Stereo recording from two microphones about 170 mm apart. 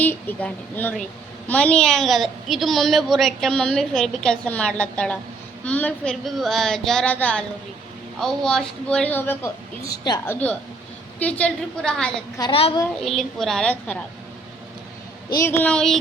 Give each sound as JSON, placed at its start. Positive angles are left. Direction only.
{"t": 0.0, "sound": "a woman's voice", "side_deg": 10}
{"t": 12.4, "sound": "a woman's voice", "side_deg": 30}
{"t": 13.1, "sound": "a woman's voice", "side_deg": 0}
{"t": 15.3, "sound": "a woman's voice", "side_deg": 15}